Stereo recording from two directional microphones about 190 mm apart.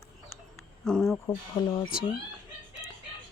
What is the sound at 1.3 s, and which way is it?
Speech, 20° left (ahead or behind).